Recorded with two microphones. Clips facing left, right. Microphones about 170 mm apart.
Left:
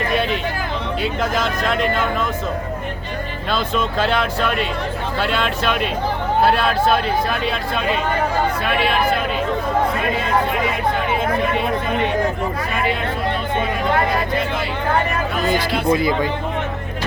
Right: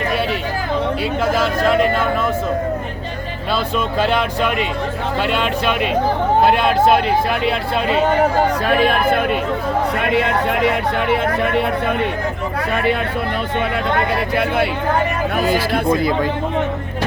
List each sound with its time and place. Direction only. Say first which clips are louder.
1.4 s speech: right 5 dB; 5° right (ahead or behind)
4.0 s speech: right 3 dB; 10° right (ahead or behind)
8.6 s speech: right 3 dB; 45° right (ahead or behind)
10.0 s a sound: right 2 dB; 75° right (ahead or behind)
14.3 s speech: right 5 dB; 65° right (ahead or behind)
15.4 s speech: right 3 dB; 5° right (ahead or behind)